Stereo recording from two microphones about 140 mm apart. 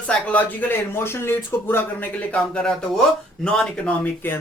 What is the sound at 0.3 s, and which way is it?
Speech, 10° left (ahead or behind).